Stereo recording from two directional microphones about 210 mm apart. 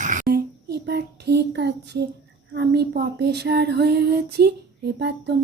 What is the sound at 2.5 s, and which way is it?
Female singing, 50° right (ahead or behind).